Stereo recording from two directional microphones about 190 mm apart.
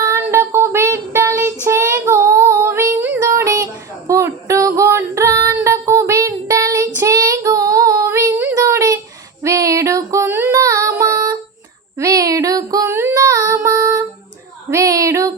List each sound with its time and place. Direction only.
0.0 s child singing: 15° right (ahead or behind)
1.6 s female singing: 15° right (ahead or behind)
5.6 s child singing: 15° right (ahead or behind)
8.5 s a sound: 15° right (ahead or behind)
9.4 s female singing: 15° right (ahead or behind)
11.9 s child singing: 15° right (ahead or behind)